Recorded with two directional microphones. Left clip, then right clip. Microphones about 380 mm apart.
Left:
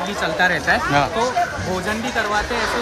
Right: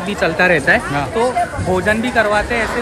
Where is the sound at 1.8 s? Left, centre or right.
Centre.